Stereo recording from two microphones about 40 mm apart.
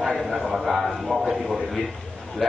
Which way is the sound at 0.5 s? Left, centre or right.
Centre.